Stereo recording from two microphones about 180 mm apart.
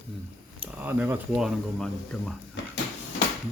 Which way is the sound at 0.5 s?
10° right (ahead or behind).